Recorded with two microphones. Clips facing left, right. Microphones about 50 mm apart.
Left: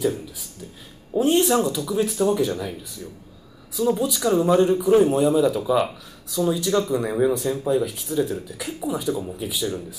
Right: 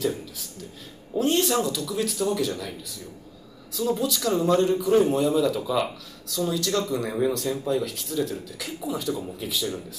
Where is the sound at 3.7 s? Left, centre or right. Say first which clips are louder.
Left 3 dB; centre.